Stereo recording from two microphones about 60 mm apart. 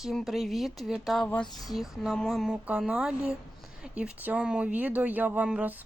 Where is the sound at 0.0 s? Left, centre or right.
Centre.